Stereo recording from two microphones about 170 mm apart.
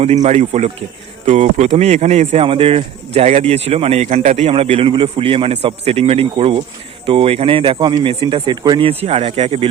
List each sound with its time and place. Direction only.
0.0 s a man's voice: 40° right (ahead or behind)